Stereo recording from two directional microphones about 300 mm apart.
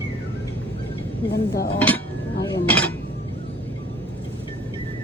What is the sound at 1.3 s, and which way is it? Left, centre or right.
Speech, left.